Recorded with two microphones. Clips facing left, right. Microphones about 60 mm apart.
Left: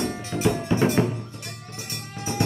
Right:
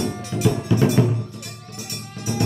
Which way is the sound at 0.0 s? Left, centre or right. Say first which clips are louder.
Right 2 dB; left.